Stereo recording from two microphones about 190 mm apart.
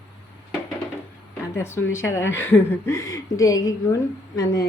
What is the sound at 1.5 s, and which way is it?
A woman's voice, 15° left (ahead or behind).